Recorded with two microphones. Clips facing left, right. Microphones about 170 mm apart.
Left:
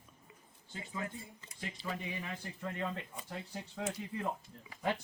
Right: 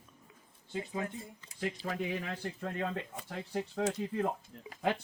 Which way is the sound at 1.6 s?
85° right.